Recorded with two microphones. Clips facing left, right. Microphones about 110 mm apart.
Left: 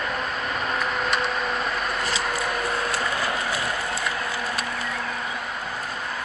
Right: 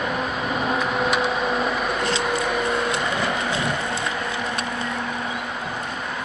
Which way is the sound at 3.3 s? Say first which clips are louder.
Right 3 dB; 25° right (ahead or behind).